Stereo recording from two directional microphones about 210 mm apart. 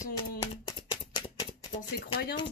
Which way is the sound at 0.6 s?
25° left (ahead or behind).